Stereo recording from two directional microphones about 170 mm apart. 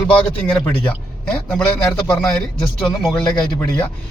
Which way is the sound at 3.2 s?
5° left (ahead or behind).